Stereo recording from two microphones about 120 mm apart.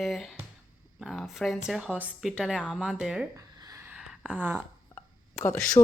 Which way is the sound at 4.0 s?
10° right (ahead or behind).